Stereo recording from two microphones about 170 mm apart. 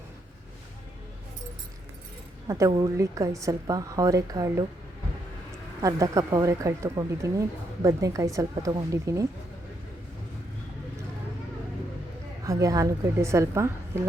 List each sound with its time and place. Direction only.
2.5 s speech: 20° right (ahead or behind)
5.8 s speech: 20° right (ahead or behind)
12.5 s a woman's voice: 20° right (ahead or behind)